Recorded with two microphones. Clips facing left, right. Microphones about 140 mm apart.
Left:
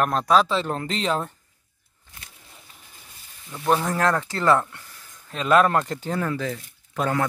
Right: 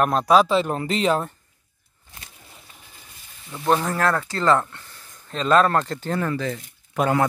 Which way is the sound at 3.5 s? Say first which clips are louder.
Right 1 dB; centre (ahead or behind).